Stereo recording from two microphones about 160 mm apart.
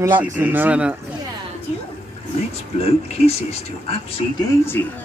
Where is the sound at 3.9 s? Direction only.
35° left (ahead or behind).